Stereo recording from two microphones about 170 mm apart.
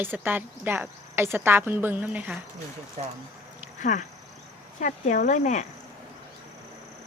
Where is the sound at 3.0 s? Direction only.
50° right (ahead or behind).